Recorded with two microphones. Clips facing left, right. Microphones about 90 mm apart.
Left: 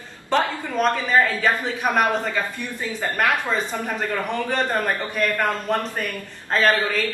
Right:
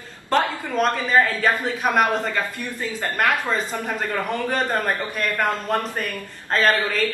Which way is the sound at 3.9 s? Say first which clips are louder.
Even; 5° right (ahead or behind).